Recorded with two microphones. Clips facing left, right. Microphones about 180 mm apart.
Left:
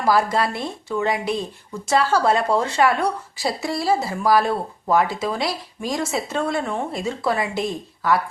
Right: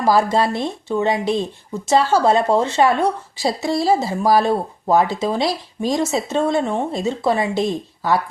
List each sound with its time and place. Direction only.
0.0 s speech: 25° right (ahead or behind)